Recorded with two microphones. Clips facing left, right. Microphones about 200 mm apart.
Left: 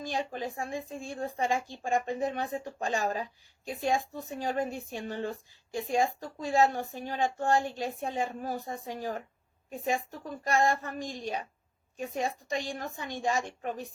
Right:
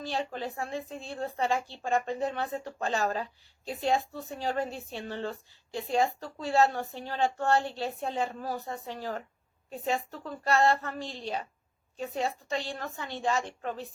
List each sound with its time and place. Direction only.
0.0 s a woman's voice: 15° left (ahead or behind)